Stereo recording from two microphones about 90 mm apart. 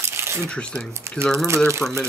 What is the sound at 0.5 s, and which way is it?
Speech, 10° left (ahead or behind).